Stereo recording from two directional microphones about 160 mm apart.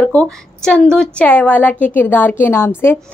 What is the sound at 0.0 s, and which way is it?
A woman's voice, 10° left (ahead or behind).